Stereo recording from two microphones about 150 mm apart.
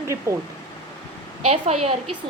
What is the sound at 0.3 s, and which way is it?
Speech, 20° right (ahead or behind).